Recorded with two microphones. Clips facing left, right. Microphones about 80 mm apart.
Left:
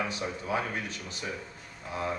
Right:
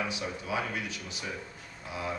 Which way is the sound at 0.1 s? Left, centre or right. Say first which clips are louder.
Left 2 dB; left.